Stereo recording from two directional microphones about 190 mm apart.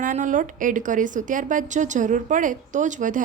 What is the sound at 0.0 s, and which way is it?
A woman's voice, 45° right (ahead or behind).